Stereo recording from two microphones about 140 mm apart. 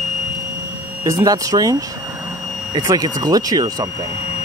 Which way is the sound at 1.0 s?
25° right (ahead or behind).